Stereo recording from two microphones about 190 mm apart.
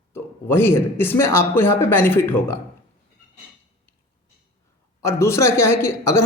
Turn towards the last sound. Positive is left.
turn(degrees=15)  # may be behind; listen again after turning